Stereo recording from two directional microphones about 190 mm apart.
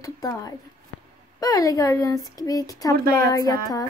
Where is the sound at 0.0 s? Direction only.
20° left (ahead or behind).